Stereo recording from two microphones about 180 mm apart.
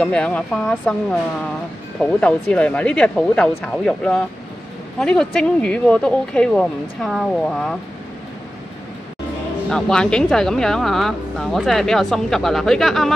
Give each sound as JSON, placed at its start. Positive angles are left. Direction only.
{"t": 0.0, "sound": "speech", "side_deg": 5}
{"t": 2.1, "sound": "speech", "side_deg": 5}
{"t": 9.7, "sound": "speech", "side_deg": 5}